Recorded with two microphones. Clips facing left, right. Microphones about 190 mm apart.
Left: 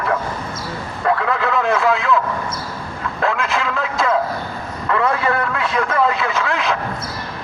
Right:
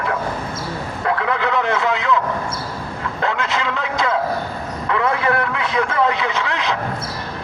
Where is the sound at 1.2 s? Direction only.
20° right (ahead or behind).